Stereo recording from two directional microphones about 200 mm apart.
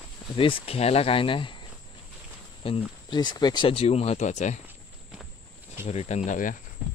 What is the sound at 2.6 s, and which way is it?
Speech, 25° left (ahead or behind).